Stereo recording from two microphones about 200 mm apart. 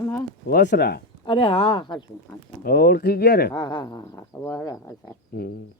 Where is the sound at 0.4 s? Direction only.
55° left (ahead or behind).